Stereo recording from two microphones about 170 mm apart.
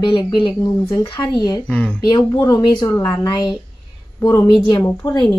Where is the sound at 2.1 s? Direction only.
25° left (ahead or behind).